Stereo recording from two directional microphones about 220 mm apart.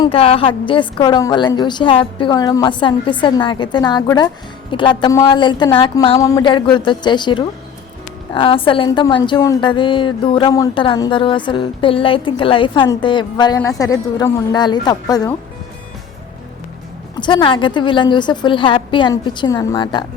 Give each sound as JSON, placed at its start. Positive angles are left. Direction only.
{"t": 0.0, "sound": "a woman's voice", "side_deg": 25}
{"t": 17.2, "sound": "a woman's voice", "side_deg": 20}